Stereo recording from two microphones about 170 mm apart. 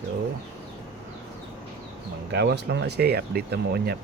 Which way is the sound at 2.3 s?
80° right.